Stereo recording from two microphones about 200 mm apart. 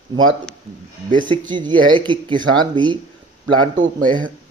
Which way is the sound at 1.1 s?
25° right (ahead or behind).